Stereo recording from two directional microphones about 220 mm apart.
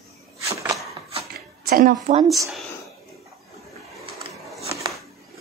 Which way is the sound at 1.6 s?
40° right (ahead or behind).